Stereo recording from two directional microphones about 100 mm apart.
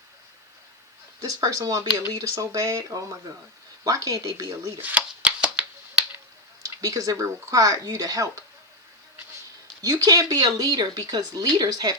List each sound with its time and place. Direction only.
1.2 s speech: 35° right (ahead or behind)
4.8 s shuffling cards: 15° right (ahead or behind)
6.6 s speech: 35° right (ahead or behind)
9.8 s speech: 35° right (ahead or behind)